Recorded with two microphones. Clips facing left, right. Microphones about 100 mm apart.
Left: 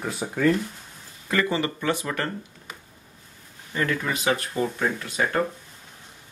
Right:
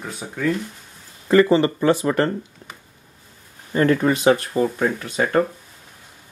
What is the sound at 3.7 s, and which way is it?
Speech, 35° right (ahead or behind).